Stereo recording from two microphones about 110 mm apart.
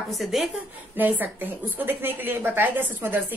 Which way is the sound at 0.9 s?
15° right (ahead or behind).